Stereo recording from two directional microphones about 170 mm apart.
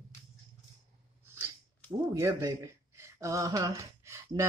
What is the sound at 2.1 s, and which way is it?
Speech, 15° right (ahead or behind).